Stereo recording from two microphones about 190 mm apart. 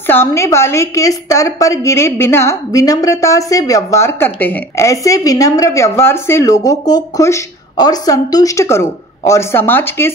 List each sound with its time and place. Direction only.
0.0 s a woman's voice: 10° left (ahead or behind)